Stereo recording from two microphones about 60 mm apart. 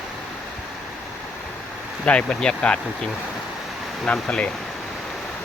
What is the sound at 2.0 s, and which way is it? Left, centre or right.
Speech, centre.